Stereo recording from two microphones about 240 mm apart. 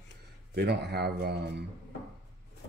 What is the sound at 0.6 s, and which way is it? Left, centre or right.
Speech, right.